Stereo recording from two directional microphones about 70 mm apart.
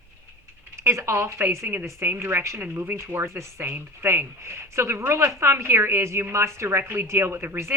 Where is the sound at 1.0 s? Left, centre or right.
Right.